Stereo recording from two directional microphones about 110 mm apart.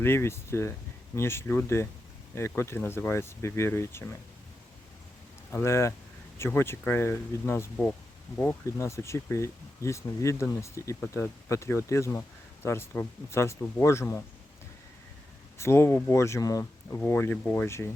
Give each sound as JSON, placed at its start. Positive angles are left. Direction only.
{"t": 0.0, "sound": "speech", "side_deg": 20}
{"t": 5.5, "sound": "speech", "side_deg": 25}
{"t": 15.5, "sound": "speech", "side_deg": 25}